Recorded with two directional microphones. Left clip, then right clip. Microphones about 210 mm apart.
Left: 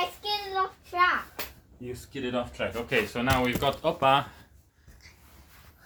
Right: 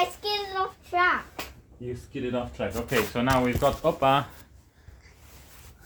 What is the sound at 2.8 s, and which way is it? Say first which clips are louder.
Speech: right 1 dB; 30° right (ahead or behind).